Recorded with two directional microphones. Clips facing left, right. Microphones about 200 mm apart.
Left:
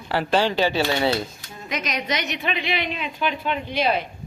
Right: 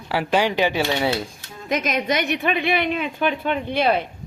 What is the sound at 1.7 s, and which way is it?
A woman's voice, 50° right (ahead or behind).